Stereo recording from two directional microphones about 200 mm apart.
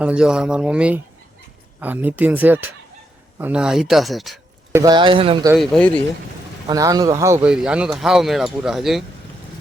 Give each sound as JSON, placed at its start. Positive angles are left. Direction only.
{"t": 0.0, "sound": "speech", "side_deg": -5}
{"t": 4.7, "sound": "speech", "side_deg": -20}
{"t": 5.5, "sound": "speech", "side_deg": 0}
{"t": 6.7, "sound": "speech", "side_deg": -20}